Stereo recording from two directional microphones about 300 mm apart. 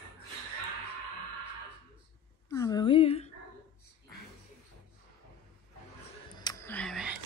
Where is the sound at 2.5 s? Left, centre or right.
Centre.